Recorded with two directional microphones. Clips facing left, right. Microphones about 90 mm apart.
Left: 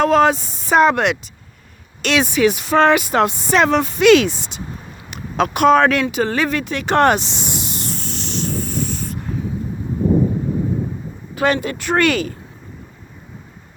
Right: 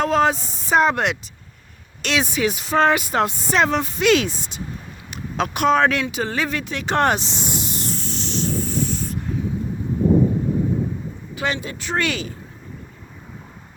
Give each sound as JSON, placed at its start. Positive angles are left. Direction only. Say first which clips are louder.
{"t": 0.0, "sound": "speech", "louder": "left 4 dB", "side_deg": 70}
{"t": 5.1, "sound": "speech", "louder": "left 5 dB", "side_deg": 60}
{"t": 11.3, "sound": "speech", "louder": "left 7 dB", "side_deg": 55}